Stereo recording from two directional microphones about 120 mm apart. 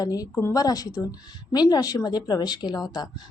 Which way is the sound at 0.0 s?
30° left (ahead or behind).